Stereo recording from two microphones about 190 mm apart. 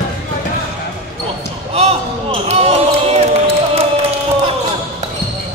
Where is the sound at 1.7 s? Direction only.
30° right (ahead or behind).